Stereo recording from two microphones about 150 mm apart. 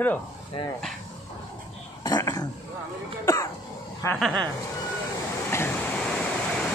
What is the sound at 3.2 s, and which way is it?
Music, 20° left (ahead or behind).